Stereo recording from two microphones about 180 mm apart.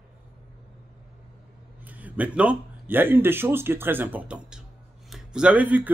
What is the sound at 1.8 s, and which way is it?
Speech, 10° right (ahead or behind).